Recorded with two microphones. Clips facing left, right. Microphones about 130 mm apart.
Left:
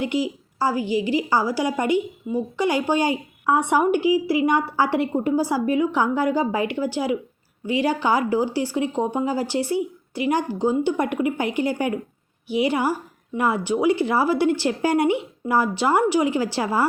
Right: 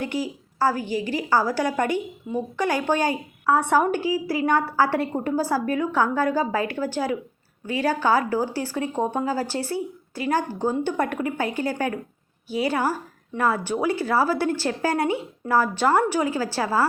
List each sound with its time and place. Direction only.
0.0 s a woman's voice: 15° left (ahead or behind)